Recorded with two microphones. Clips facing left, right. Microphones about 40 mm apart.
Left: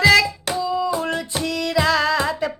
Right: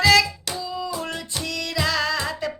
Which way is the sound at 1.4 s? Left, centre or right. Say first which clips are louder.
Left 5 dB; centre.